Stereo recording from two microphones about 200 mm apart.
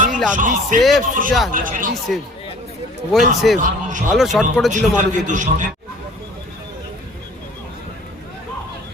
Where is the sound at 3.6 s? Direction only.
40° right (ahead or behind).